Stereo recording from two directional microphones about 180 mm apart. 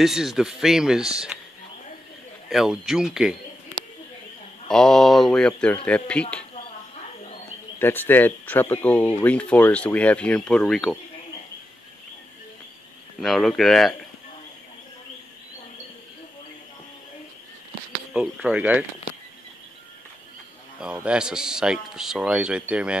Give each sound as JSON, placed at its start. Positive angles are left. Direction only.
{"t": 0.0, "sound": "speech", "side_deg": 0}
{"t": 2.5, "sound": "speech", "side_deg": 0}
{"t": 4.6, "sound": "speech", "side_deg": 5}
{"t": 7.8, "sound": "speech", "side_deg": 10}
{"t": 13.2, "sound": "speech", "side_deg": 0}
{"t": 18.1, "sound": "speech", "side_deg": -5}
{"t": 20.8, "sound": "speech", "side_deg": -5}